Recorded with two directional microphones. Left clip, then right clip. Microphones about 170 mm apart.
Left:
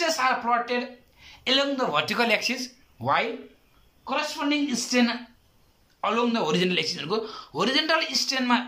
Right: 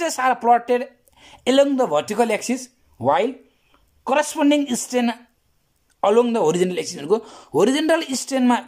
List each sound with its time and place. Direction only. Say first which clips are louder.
0.0 s a man's voice: right 4 dB; 50° right (ahead or behind)